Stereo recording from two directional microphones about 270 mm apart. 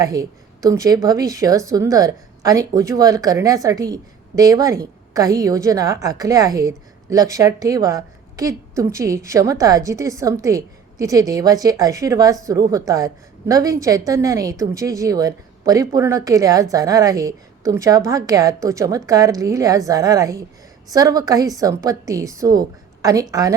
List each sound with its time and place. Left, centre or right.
0.0 s a woman's voice: centre